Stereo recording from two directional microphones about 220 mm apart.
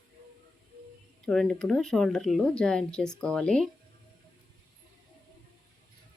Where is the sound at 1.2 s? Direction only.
Centre (ahead or behind).